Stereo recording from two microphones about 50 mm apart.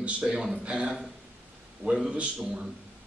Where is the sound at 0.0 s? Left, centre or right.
Right.